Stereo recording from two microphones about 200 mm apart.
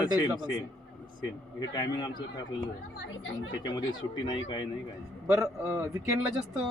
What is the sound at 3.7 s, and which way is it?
Speech, 20° left (ahead or behind).